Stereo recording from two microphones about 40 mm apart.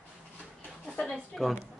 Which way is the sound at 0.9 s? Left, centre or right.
Centre.